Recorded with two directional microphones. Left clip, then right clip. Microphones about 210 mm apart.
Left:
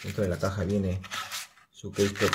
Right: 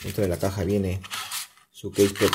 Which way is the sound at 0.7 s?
5° left (ahead or behind).